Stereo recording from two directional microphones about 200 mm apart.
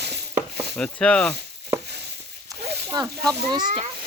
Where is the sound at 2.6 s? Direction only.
55° right (ahead or behind).